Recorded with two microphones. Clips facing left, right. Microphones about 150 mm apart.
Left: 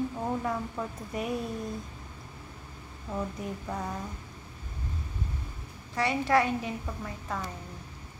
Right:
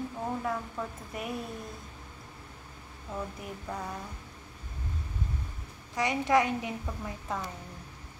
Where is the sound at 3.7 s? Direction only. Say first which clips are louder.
Left 1 dB; 10° left (ahead or behind).